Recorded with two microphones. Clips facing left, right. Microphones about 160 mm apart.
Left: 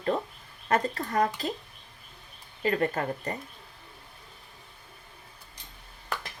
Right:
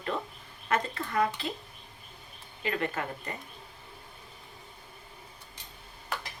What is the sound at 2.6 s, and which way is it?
Speech, 40° left (ahead or behind).